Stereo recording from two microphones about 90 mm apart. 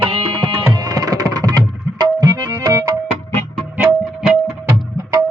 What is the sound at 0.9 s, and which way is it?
Music, 45° right (ahead or behind).